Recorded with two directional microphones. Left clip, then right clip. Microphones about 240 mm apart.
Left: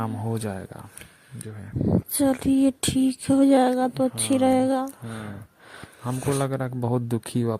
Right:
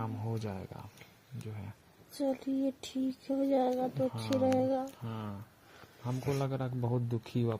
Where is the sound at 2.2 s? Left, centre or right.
Left.